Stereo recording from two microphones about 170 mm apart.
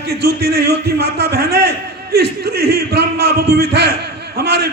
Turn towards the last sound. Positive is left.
turn(degrees=-75)  # may be behind; listen again after turning